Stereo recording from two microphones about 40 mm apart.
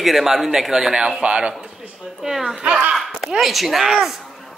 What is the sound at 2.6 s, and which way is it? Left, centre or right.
Speech, right.